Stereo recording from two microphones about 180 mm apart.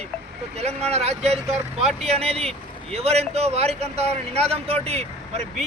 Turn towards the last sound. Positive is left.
turn(degrees=-35)  # may be behind; listen again after turning